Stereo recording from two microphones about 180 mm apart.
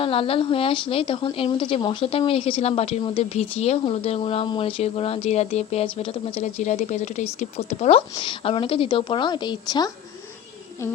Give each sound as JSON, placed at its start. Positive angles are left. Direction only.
{"t": 0.0, "sound": "a woman's voice", "side_deg": 30}